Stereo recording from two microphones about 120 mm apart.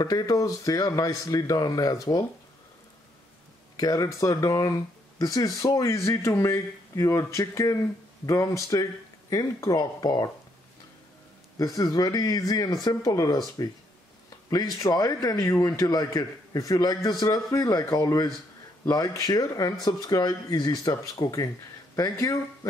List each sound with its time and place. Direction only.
0.0 s speech: 30° left (ahead or behind)
3.7 s speech: 30° left (ahead or behind)
11.5 s speech: 30° left (ahead or behind)
14.8 s speech: 30° left (ahead or behind)